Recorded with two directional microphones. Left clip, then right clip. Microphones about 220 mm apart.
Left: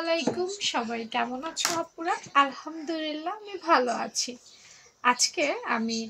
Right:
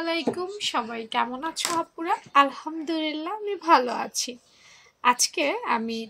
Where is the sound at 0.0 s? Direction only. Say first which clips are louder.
Even; 50° right (ahead or behind).